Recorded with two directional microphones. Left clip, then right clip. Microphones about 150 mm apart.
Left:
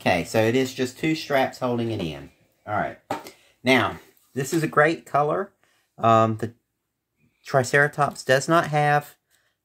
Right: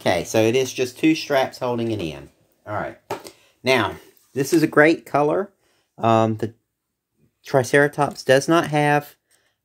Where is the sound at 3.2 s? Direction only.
60° right (ahead or behind).